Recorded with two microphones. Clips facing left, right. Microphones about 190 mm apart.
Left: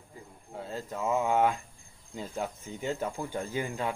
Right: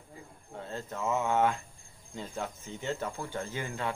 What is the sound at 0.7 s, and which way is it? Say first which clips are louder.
Speech: left 2 dB; 10° left (ahead or behind).